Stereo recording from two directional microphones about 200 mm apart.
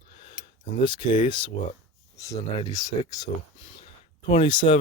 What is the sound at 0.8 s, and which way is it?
Speech, 25° left (ahead or behind).